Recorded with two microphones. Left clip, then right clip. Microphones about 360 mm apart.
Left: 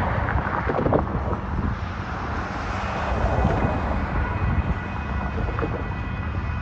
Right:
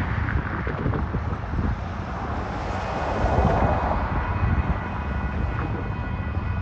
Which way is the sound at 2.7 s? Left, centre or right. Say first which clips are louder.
Right 1 dB; right.